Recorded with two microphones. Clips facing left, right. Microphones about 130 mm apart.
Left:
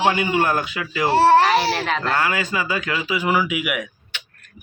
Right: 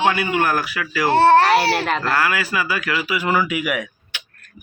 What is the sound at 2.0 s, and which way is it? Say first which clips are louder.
Speech: right 1 dB; 25° left (ahead or behind).